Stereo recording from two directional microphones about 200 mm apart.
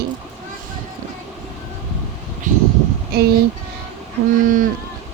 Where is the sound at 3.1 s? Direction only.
50° right (ahead or behind).